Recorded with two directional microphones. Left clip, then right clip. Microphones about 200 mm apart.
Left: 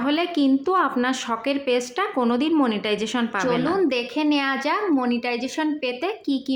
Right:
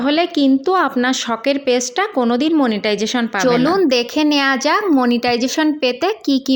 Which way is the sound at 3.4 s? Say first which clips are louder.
Right 8 dB; 35° right (ahead or behind).